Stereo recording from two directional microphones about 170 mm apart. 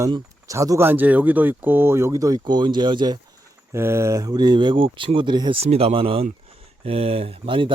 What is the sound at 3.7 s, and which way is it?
Speech, 15° right (ahead or behind).